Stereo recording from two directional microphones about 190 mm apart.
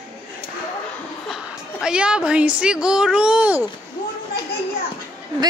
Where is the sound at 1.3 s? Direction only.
5° right (ahead or behind).